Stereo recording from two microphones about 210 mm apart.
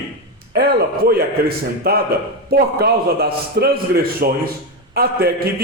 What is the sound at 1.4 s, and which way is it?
A man's voice, 45° right (ahead or behind).